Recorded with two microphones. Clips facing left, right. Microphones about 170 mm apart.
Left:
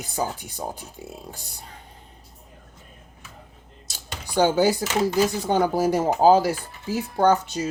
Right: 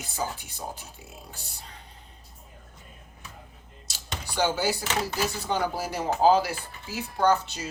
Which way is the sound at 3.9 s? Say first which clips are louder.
Left 7 dB; 50° left (ahead or behind).